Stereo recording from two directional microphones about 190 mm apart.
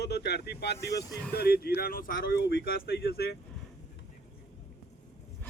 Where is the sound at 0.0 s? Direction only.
60° left (ahead or behind).